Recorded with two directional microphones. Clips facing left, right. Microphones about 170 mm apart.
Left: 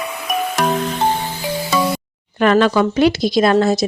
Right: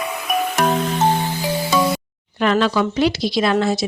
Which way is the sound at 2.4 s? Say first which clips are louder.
Left 4 dB; 55° left (ahead or behind).